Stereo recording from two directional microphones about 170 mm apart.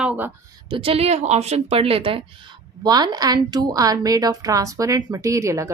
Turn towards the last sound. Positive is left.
turn(degrees=-20)  # may be behind; listen again after turning